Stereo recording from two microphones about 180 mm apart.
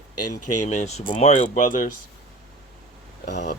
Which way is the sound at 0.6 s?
40° left (ahead or behind).